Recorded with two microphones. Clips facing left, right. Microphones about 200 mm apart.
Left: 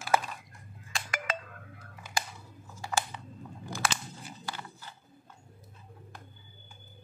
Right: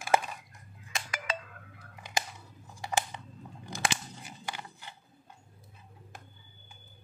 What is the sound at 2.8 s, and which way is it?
Crunch, 20° right (ahead or behind).